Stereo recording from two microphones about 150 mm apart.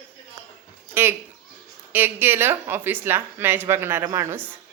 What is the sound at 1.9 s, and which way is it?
Speech, 15° right (ahead or behind).